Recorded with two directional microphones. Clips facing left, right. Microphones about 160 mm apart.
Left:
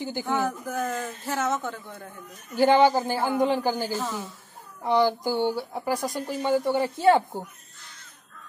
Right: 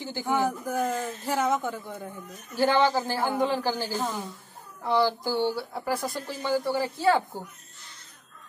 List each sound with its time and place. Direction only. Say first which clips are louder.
0.2 s speech: right 2 dB; 10° right (ahead or behind)
2.5 s speech: left 4 dB; 15° left (ahead or behind)
3.9 s a woman's voice: even; centre (ahead or behind)
4.8 s speech: left 2 dB; 15° left (ahead or behind)